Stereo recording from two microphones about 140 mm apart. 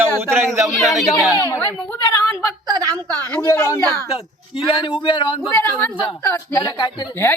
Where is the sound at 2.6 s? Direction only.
25° right (ahead or behind).